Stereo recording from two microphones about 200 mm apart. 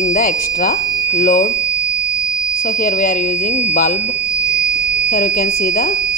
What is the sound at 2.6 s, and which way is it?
A woman's voice, 40° left (ahead or behind).